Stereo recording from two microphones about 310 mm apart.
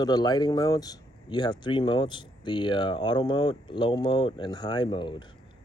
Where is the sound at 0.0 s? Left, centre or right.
Centre.